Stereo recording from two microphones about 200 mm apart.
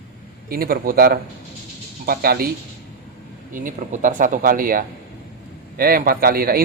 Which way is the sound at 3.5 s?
40° right (ahead or behind).